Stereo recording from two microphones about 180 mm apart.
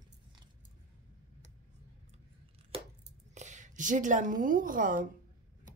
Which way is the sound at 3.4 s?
40° right (ahead or behind).